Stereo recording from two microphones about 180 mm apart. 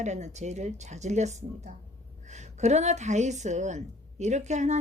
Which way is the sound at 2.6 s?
40° right (ahead or behind).